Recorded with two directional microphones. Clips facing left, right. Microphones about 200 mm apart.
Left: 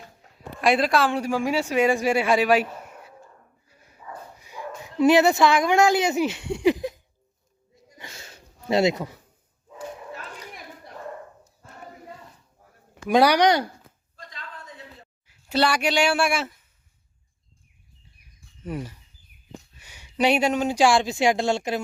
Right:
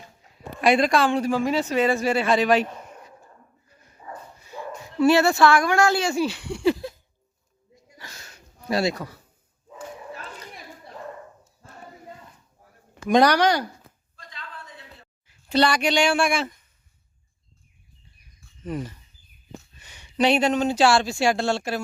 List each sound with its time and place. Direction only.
0.3 s speech: centre (ahead or behind)
4.0 s dog: 30° right (ahead or behind)
4.4 s speech: 15° left (ahead or behind)
8.6 s speech: 20° left (ahead or behind)
12.9 s speech: 10° left (ahead or behind)
15.3 s speech: 5° left (ahead or behind)
18.6 s speech: 10° left (ahead or behind)